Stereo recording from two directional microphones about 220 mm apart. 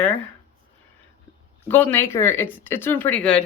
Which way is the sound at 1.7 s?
10° left (ahead or behind).